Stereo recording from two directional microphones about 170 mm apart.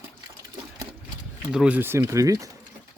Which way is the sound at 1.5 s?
5° right (ahead or behind).